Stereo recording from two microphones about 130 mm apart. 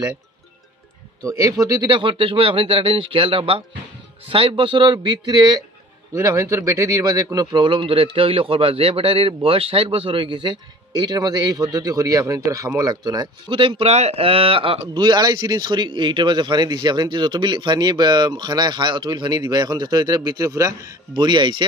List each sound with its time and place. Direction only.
1.2 s speech: 25° right (ahead or behind)
6.1 s speech: 20° right (ahead or behind); by 21.6 s 35° right (ahead or behind)